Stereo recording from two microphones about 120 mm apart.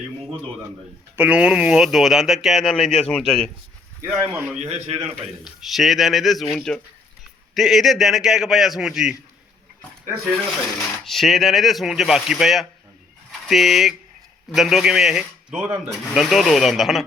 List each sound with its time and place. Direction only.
1.1 s speech: 15° right (ahead or behind); by 3.5 s 5° left (ahead or behind)
4.1 s a man's voice: 10° right (ahead or behind)
4.5 s a man's voice: 65° right (ahead or behind)
5.5 s speech: 5° right (ahead or behind)
10.3 s speech: centre (ahead or behind)